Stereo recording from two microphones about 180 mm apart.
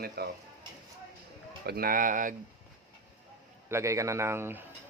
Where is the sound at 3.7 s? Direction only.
15° right (ahead or behind).